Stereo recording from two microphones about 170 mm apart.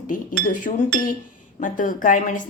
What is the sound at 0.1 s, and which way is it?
Speech, 50° left (ahead or behind).